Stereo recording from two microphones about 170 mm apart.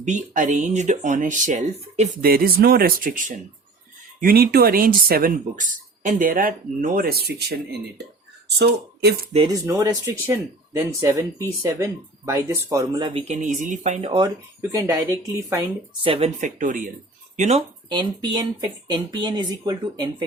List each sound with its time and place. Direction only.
0.0 s speech: 45° right (ahead or behind)
2.2 s speech: 60° right (ahead or behind)
9.5 s speech: 20° right (ahead or behind)
13.1 s speech: 40° right (ahead or behind)
14.1 s speech: 25° right (ahead or behind)
16.0 s speech: 35° right (ahead or behind)
16.4 s speech: 50° right (ahead or behind)
17.8 s speech: 25° right (ahead or behind)